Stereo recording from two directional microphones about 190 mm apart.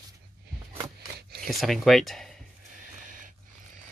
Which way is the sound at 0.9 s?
55° right (ahead or behind).